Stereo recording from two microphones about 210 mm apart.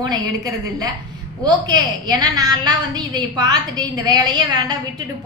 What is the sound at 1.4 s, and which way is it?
A woman's voice, 20° right (ahead or behind).